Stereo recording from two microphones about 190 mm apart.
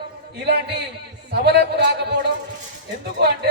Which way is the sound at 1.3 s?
60° right (ahead or behind).